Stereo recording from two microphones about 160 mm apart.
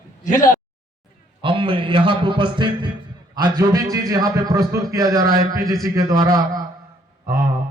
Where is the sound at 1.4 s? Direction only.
35° right (ahead or behind).